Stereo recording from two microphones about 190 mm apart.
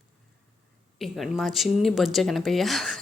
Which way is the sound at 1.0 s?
Centre (ahead or behind).